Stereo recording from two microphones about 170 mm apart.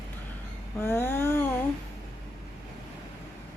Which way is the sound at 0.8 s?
15° left (ahead or behind).